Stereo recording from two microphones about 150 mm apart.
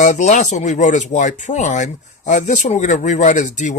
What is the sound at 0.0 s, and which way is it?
Speech, 55° left (ahead or behind).